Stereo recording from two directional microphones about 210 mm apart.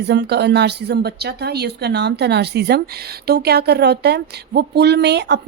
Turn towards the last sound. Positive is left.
turn(degrees=-55)  # may be behind; listen again after turning